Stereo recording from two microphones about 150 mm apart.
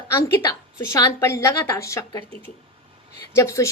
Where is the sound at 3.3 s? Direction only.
20° left (ahead or behind).